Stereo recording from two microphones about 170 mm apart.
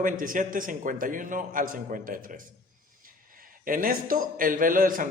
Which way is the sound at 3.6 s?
55° right (ahead or behind).